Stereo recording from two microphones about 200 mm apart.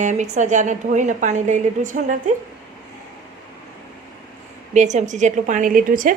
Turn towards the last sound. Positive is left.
turn(degrees=-45)  # may be behind; listen again after turning